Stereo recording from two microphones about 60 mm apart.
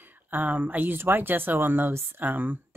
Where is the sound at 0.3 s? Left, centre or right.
Right.